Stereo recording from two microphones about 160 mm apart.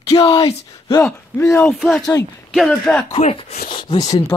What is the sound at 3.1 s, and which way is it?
Speech, 35° left (ahead or behind).